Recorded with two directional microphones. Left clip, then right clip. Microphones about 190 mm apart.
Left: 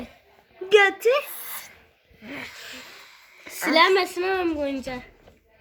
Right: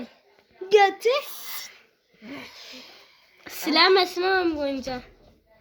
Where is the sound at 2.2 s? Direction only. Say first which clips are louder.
Left 4 dB; 20° left (ahead or behind).